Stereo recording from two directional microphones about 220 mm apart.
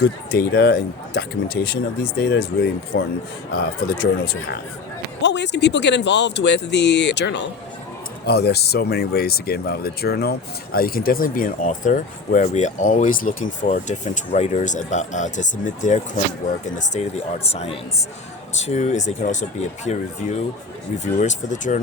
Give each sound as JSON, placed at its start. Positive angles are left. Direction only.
{"t": 0.0, "sound": "speech", "side_deg": 45}